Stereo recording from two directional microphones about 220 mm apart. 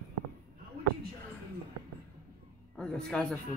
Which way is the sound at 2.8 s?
5° left (ahead or behind).